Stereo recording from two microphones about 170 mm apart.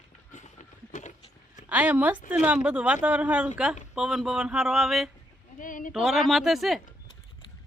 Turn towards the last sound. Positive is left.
turn(degrees=0)  # may be behind; listen again after turning